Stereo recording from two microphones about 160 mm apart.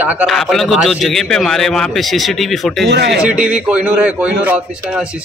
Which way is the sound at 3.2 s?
5° right (ahead or behind).